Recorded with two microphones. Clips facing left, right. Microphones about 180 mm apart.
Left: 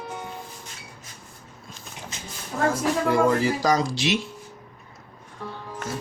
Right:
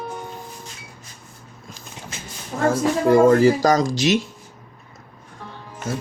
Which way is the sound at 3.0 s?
45° right (ahead or behind).